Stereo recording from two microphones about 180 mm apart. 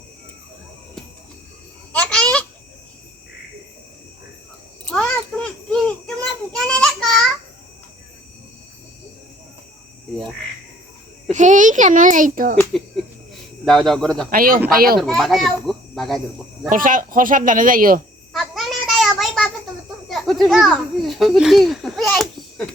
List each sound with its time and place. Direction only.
1.9 s babbling: 5° left (ahead or behind)
4.9 s a sound: 5° left (ahead or behind)
11.3 s speech: 45° right (ahead or behind)
13.7 s speech: 5° left (ahead or behind)
14.3 s speech: 55° right (ahead or behind)
15.0 s a child's voice: centre (ahead or behind)
16.6 s speech: 50° right (ahead or behind)
18.3 s a sound: centre (ahead or behind)
20.1 s children playing: centre (ahead or behind)